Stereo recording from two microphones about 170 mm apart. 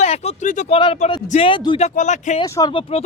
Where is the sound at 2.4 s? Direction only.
25° left (ahead or behind).